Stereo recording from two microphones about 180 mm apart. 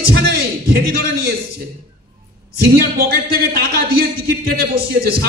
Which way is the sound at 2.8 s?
60° right (ahead or behind).